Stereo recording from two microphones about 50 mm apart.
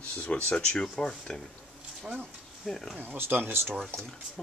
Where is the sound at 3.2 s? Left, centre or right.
Right.